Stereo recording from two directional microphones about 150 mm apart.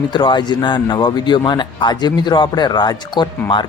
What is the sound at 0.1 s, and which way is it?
Speech, 30° left (ahead or behind).